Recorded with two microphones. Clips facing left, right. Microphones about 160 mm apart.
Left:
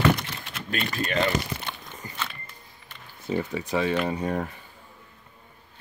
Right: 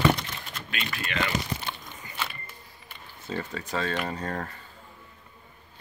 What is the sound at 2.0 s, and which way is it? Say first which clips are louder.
Music: left 4 dB; 40° left (ahead or behind).